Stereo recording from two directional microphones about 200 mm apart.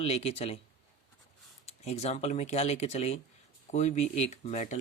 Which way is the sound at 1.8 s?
30° left (ahead or behind).